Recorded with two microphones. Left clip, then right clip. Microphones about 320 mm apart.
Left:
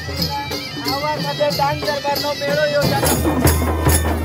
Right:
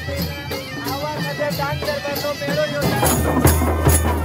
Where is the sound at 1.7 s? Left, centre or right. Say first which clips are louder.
Left 4 dB; left.